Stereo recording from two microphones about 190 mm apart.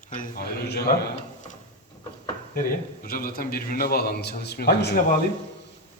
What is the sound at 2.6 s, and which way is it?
A man's voice, 50° left (ahead or behind).